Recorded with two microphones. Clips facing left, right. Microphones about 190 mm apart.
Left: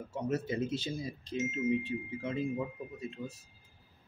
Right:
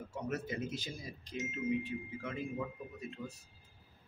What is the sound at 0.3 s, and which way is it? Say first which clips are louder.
Speech: left 6 dB; 25° left (ahead or behind).